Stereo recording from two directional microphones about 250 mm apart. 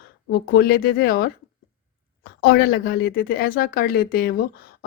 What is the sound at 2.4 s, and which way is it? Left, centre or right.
Speech, left.